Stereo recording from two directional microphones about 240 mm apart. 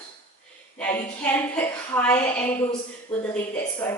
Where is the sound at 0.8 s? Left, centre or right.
Centre.